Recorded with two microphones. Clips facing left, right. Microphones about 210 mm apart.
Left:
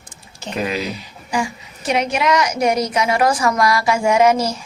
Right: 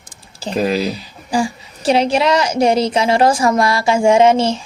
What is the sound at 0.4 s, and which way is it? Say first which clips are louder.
A woman's voice: right 5 dB; 35° right (ahead or behind).